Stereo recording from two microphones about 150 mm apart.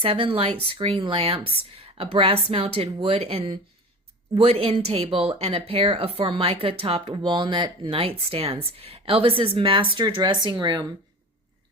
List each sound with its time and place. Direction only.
0.0 s a woman's voice: 40° right (ahead or behind)